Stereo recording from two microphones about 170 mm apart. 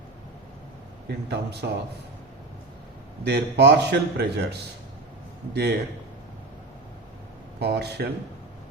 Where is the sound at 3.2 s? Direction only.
80° right.